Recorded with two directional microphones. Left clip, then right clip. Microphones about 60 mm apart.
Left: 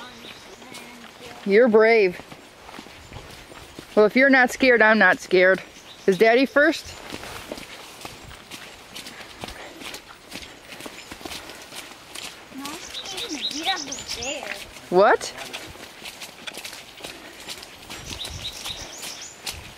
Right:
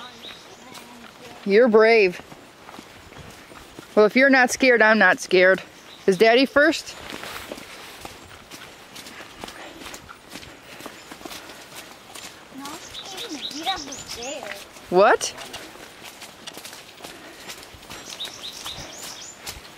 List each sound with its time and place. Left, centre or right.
1.5 s speech: right
3.9 s speech: right
13.0 s a sound: centre
14.9 s speech: right